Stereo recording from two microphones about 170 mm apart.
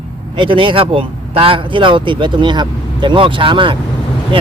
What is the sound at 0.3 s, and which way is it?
Speech, 30° right (ahead or behind).